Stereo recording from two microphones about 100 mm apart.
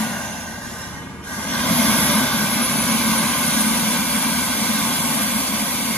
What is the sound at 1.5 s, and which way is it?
Vehicle, 10° left (ahead or behind).